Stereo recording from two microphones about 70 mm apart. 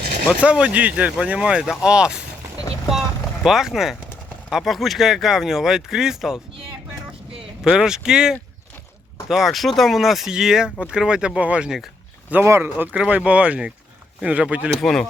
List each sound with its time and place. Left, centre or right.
0.3 s speech: centre
3.4 s speech: centre
7.6 s speech: centre
12.5 s speech: right
12.7 s speech: right
14.8 s speech: centre